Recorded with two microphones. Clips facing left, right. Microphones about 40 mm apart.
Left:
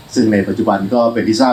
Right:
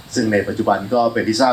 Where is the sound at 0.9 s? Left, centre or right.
Left.